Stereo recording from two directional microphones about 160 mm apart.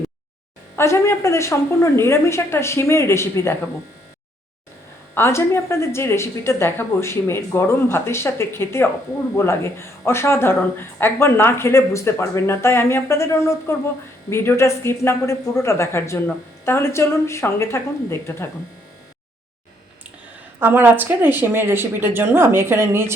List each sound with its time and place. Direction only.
0.8 s speech: 15° left (ahead or behind)
5.1 s speech: 15° left (ahead or behind)
20.6 s speech: 10° right (ahead or behind)